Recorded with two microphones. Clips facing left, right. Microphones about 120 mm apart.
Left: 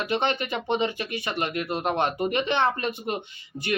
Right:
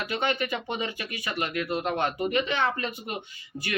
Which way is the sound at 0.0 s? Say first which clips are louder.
Left 2 dB; 25° left (ahead or behind).